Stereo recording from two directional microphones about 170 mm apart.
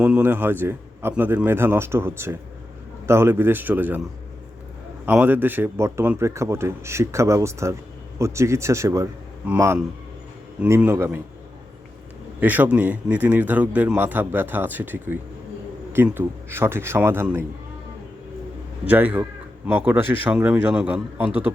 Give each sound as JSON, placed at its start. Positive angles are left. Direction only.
{"t": 0.0, "sound": "a man's voice", "side_deg": -10}
{"t": 5.0, "sound": "a man's voice", "side_deg": -10}
{"t": 12.4, "sound": "a man's voice", "side_deg": -10}
{"t": 18.9, "sound": "a man's voice", "side_deg": -10}